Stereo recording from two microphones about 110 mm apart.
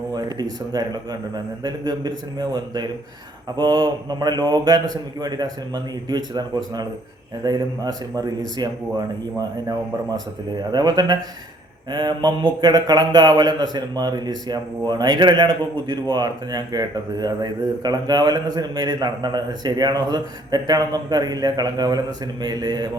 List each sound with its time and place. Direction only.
0.1 s speech: 40° right (ahead or behind)
7.4 s speech: 35° right (ahead or behind)